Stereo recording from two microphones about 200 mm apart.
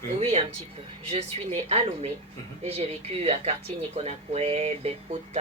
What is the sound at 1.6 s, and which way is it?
Speech, 30° right (ahead or behind).